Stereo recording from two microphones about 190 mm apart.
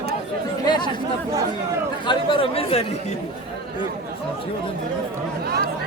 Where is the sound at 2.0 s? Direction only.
25° left (ahead or behind).